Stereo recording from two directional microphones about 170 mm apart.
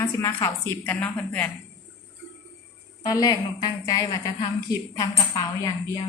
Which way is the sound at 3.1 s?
25° left (ahead or behind).